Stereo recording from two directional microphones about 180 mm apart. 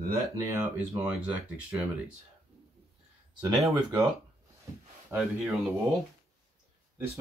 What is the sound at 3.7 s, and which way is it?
Speech, 20° right (ahead or behind).